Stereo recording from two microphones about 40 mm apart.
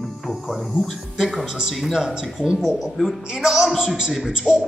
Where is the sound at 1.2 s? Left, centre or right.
Centre.